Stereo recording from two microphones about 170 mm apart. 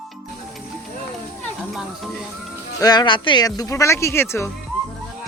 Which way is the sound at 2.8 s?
25° left (ahead or behind).